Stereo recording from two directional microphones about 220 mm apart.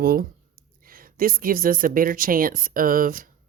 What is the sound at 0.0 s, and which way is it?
Speech, 45° right (ahead or behind).